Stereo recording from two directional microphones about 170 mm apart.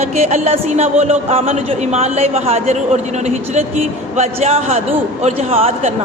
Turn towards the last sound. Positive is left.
turn(degrees=-35)  # may be behind; listen again after turning